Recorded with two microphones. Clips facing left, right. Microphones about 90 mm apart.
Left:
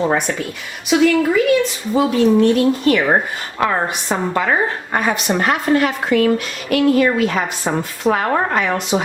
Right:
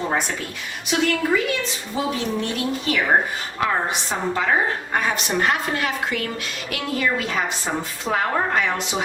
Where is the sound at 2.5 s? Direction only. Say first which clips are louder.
Left 10 dB; 50° left (ahead or behind).